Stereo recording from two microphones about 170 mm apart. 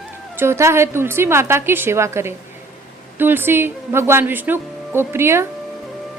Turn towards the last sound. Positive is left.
turn(degrees=-15)  # may be behind; listen again after turning